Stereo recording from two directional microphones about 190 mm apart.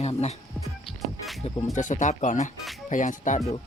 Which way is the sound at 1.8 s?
40° left (ahead or behind).